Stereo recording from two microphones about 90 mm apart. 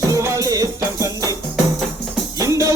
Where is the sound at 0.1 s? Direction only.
35° right (ahead or behind).